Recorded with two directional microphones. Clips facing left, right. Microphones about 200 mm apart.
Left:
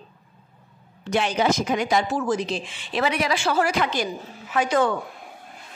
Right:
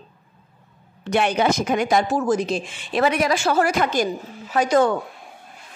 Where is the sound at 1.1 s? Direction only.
60° right (ahead or behind); by 4.9 s 40° right (ahead or behind).